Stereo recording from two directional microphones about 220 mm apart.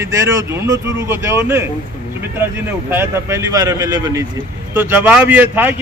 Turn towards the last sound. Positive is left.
turn(degrees=-10)  # may be behind; listen again after turning